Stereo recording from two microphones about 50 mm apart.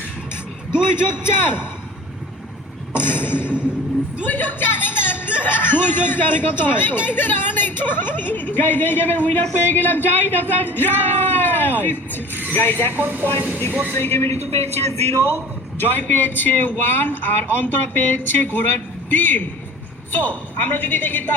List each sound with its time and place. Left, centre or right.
0.7 s a man's voice: centre
1.2 s a man's voice: left
2.9 s a sound: left
4.3 s a man's voice: left
13.9 s a man's voice: left
15.8 s speech: left